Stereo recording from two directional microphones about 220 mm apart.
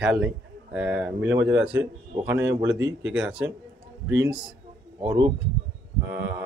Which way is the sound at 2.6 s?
55° right (ahead or behind).